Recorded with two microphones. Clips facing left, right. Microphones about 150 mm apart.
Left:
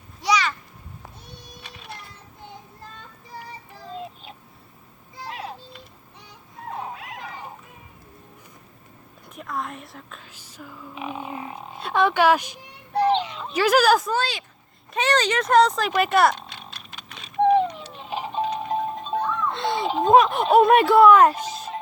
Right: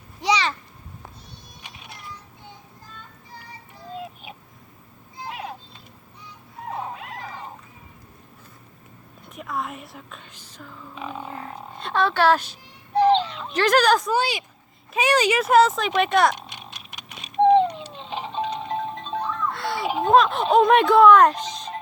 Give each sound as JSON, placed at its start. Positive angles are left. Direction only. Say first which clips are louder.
{"t": 0.2, "sound": "a sound", "louder": "even", "side_deg": -25}
{"t": 3.9, "sound": "a sound", "louder": "right 1 dB", "side_deg": -5}
{"t": 6.7, "sound": "cat", "louder": "right 1 dB", "side_deg": 0}
{"t": 9.3, "sound": "speech", "louder": "right 1 dB", "side_deg": 0}
{"t": 14.1, "sound": "speech", "louder": "right 2 dB", "side_deg": -10}
{"t": 16.3, "sound": "a sound", "louder": "left 1 dB", "side_deg": -15}
{"t": 18.0, "sound": "music", "louder": "left 2 dB", "side_deg": 10}
{"t": 19.5, "sound": "giggle", "louder": "left 2 dB", "side_deg": 20}
{"t": 20.0, "sound": "speech", "louder": "left 1 dB", "side_deg": 15}